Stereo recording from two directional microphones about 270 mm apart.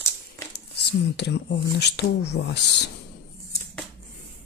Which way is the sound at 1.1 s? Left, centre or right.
Left.